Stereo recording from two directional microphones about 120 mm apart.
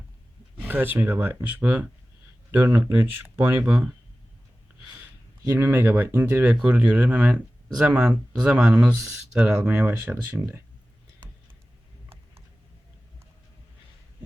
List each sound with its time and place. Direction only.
0.6 s speech: 15° right (ahead or behind)
5.5 s speech: 20° right (ahead or behind)